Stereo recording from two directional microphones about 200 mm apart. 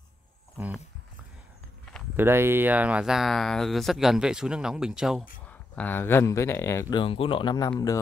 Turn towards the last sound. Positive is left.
turn(degrees=20)  # may be behind; listen again after turning